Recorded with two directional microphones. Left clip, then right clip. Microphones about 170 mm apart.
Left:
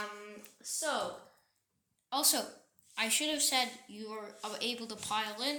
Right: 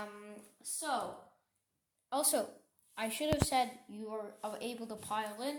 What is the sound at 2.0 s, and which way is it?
Speech, 65° right (ahead or behind).